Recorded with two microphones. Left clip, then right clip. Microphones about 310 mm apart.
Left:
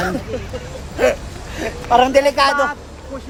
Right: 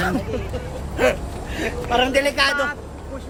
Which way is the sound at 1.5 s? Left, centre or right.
Centre.